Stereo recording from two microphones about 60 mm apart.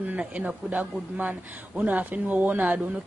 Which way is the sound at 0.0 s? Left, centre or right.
Right.